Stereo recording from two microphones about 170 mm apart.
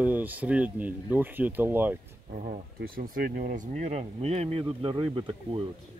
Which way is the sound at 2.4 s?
55° right (ahead or behind).